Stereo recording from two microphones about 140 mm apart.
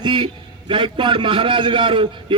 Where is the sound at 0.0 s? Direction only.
35° right (ahead or behind).